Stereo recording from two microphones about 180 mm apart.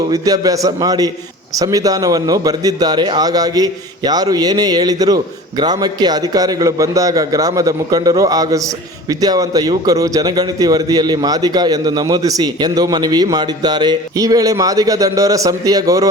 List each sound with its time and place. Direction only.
0.1 s a man's voice: 20° right (ahead or behind)